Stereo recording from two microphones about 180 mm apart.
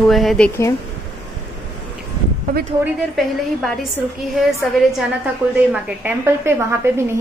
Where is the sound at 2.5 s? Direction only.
50° right (ahead or behind).